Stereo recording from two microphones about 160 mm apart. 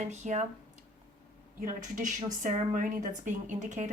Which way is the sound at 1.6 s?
55° right (ahead or behind).